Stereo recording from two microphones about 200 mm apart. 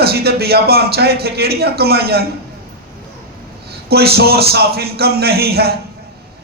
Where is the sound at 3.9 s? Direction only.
50° right (ahead or behind).